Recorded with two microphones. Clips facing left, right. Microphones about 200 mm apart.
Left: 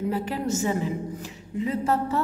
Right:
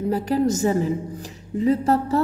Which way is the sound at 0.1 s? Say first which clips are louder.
Right 6 dB; 40° right (ahead or behind).